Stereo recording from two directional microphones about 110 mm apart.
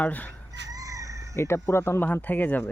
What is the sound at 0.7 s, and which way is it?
Chicken, 30° right (ahead or behind).